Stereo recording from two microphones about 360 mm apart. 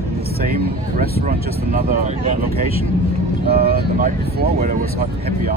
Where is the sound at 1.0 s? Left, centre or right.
Right.